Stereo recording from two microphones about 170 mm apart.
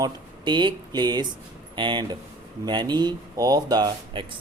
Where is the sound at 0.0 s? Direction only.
25° right (ahead or behind).